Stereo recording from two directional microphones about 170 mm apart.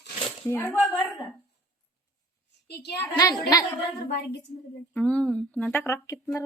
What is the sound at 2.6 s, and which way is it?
Speech, 75° left (ahead or behind).